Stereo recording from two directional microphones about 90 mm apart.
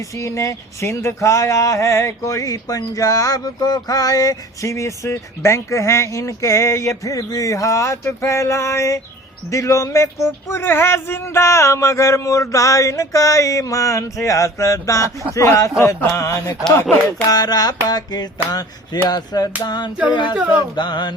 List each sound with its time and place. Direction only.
0.0 s speech: 35° left (ahead or behind)
17.2 s a sound: 45° left (ahead or behind)
20.1 s music: 60° left (ahead or behind)